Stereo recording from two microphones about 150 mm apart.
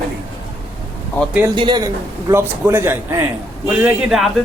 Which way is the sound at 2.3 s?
15° right (ahead or behind).